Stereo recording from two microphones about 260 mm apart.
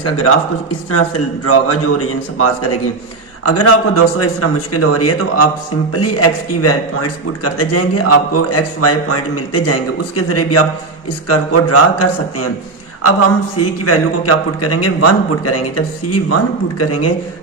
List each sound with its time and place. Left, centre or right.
0.0 s a man's voice: left
1.5 s a man's voice: left
13.8 s a man's voice: left